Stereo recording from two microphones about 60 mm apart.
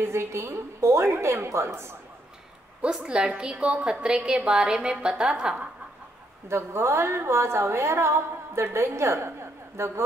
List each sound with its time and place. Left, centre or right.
0.0 s a woman's voice: right
2.8 s a woman's voice: centre
6.5 s a woman's voice: right